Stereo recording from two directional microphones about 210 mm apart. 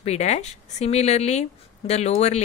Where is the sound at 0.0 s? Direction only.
30° left (ahead or behind).